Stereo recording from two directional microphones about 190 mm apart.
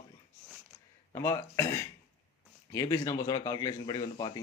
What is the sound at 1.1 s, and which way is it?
Speech, 15° left (ahead or behind).